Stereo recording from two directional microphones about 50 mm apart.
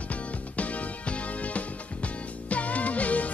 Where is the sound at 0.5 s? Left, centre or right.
Left.